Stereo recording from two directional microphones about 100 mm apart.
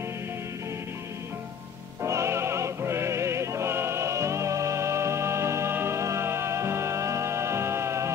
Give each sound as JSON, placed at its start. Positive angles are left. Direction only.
{"t": 2.0, "sound": "music", "side_deg": -30}